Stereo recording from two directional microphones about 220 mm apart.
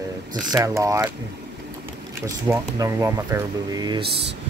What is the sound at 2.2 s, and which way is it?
Speech, 15° right (ahead or behind).